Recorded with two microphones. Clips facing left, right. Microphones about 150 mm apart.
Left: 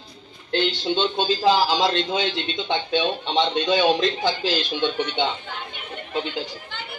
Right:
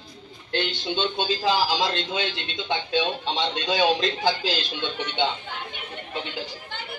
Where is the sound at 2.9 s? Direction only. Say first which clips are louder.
Left 2 dB; 70° left (ahead or behind).